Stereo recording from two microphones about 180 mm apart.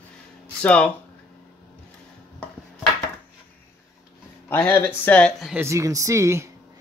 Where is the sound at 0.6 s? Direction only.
5° left (ahead or behind).